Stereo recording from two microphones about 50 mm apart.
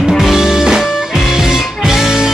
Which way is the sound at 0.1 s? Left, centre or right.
Centre.